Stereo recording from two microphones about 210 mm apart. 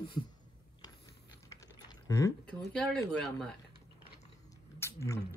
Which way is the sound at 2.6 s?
5° left (ahead or behind).